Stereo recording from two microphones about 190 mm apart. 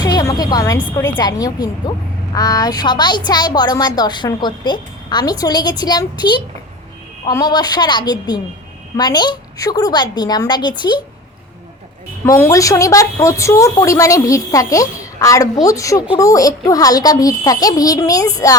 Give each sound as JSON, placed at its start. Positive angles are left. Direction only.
{"t": 0.0, "sound": "a woman's voice", "side_deg": 20}
{"t": 12.2, "sound": "a woman's voice", "side_deg": 15}